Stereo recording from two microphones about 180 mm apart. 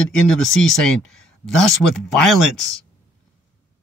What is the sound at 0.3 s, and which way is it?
Speech, centre (ahead or behind).